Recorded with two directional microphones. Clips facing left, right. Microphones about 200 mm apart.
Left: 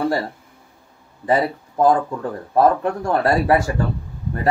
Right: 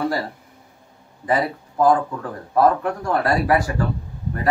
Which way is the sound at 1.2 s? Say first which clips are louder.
Left 2 dB; 25° left (ahead or behind).